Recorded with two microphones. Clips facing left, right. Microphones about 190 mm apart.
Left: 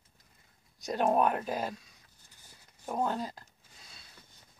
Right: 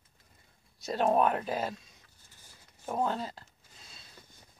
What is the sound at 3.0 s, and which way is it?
Speech, 10° left (ahead or behind).